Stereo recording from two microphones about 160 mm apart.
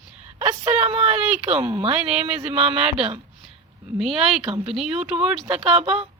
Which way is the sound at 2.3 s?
40° right (ahead or behind).